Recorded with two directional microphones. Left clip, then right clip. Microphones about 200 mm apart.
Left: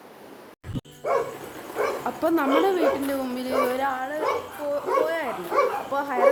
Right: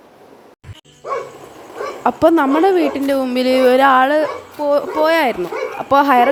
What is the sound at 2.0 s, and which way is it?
A woman's voice, 35° right (ahead or behind).